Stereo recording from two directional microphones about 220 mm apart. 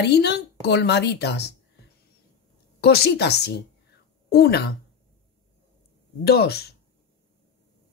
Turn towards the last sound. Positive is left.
turn(degrees=45)  # may be behind; listen again after turning